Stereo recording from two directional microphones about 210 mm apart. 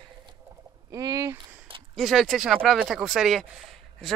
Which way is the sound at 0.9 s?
15° right (ahead or behind).